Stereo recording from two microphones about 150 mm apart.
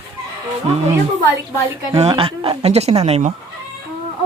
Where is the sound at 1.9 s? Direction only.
40° right (ahead or behind).